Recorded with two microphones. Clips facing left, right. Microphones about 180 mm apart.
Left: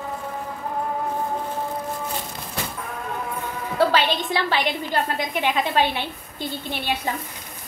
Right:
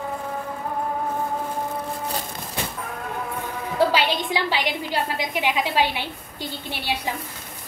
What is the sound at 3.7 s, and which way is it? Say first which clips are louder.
A woman's voice: left 1 dB; 10° right (ahead or behind).